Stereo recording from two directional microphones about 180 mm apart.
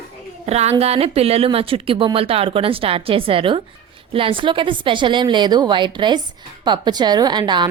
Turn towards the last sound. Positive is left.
turn(degrees=-25)  # may be behind; listen again after turning